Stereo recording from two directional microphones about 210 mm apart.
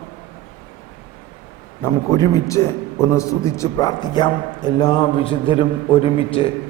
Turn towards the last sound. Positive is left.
turn(degrees=25)  # may be behind; listen again after turning